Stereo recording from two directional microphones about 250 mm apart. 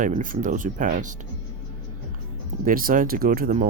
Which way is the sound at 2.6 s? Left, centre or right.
Right.